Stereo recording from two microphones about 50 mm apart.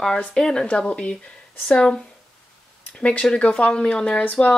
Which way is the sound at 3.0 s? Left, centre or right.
Left.